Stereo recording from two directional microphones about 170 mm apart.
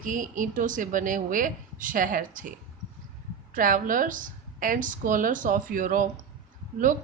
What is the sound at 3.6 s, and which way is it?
Speech, 50° right (ahead or behind).